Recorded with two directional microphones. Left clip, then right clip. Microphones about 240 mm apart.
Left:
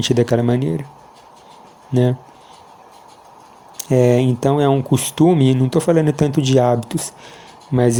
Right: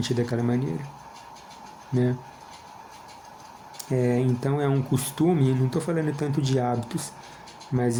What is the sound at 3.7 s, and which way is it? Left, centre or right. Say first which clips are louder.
Speech: left 11 dB; left.